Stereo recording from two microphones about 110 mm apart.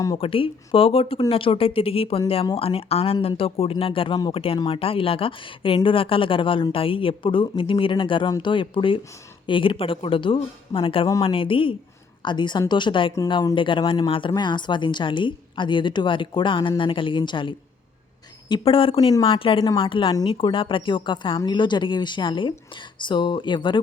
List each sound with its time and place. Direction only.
0.2 s speech: 55° left (ahead or behind)